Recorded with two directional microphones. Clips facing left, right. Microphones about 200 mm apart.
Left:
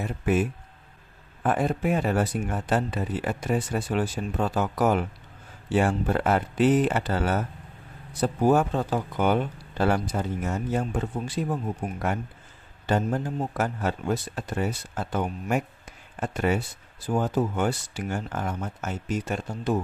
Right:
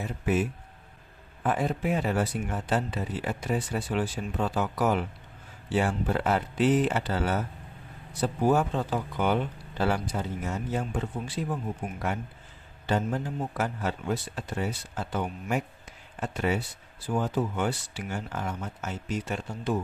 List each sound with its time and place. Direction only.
0.0 s speech: 55° left (ahead or behind)
12.8 s speech: 45° left (ahead or behind)